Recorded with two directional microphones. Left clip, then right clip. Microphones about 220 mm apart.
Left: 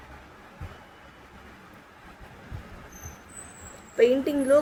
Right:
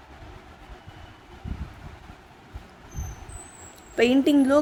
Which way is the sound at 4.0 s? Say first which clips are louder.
Right 1 dB; 55° right (ahead or behind).